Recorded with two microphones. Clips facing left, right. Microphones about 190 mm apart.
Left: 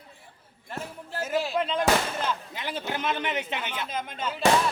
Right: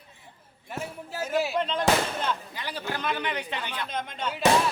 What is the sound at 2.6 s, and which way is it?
A man's voice, 20° left (ahead or behind).